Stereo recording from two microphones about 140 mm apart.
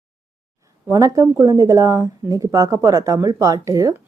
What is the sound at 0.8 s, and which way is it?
Speech, 25° right (ahead or behind).